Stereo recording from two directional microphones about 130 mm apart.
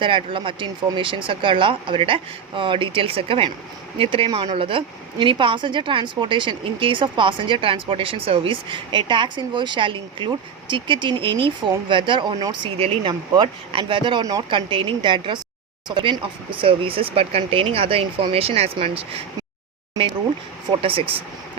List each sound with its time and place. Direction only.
0.0 s speech: 40° right (ahead or behind)
20.7 s speech: 45° right (ahead or behind)